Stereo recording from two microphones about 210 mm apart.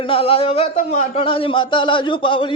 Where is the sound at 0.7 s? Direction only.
40° left (ahead or behind).